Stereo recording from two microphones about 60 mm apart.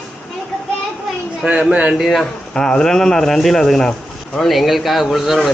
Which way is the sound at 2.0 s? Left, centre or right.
Centre.